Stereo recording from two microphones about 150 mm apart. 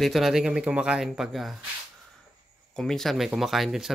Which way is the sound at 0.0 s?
Centre (ahead or behind).